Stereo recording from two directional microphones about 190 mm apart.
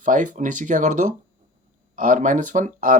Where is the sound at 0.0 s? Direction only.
40° right (ahead or behind).